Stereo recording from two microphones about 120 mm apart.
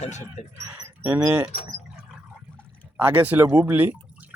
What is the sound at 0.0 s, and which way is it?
Speech, 75° left (ahead or behind).